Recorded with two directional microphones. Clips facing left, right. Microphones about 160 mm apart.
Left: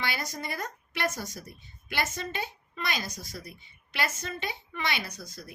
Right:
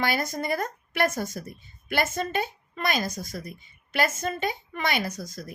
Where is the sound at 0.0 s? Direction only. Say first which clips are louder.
Right 7 dB; 50° right (ahead or behind).